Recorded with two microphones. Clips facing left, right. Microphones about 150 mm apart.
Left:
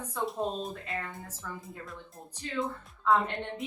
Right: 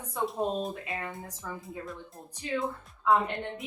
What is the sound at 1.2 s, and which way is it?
Speech, 15° right (ahead or behind).